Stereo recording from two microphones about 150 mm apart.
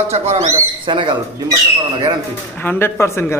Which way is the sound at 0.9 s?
30° right (ahead or behind).